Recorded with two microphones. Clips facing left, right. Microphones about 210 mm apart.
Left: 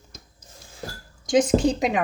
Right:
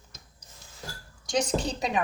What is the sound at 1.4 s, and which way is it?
Speech, 50° left (ahead or behind).